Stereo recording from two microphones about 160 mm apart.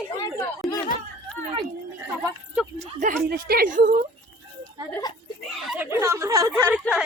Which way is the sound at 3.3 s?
70° right (ahead or behind).